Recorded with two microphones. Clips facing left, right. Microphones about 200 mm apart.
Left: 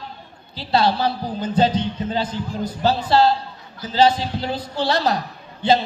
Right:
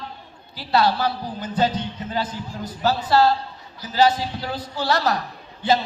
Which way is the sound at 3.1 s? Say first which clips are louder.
Even; 25° left (ahead or behind).